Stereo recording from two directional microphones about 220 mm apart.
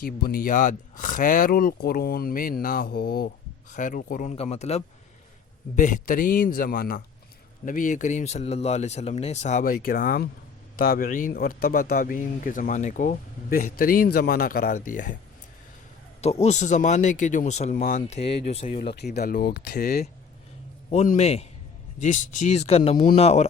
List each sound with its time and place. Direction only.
0.0 s speech: 40° left (ahead or behind)
16.2 s speech: 30° left (ahead or behind)
18.8 s speech: 45° left (ahead or behind)
20.9 s a man's voice: 30° left (ahead or behind)